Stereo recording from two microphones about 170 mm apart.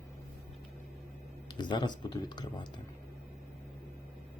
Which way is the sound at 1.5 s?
25° left (ahead or behind).